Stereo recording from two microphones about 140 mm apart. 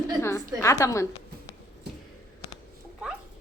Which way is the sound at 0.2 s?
20° left (ahead or behind).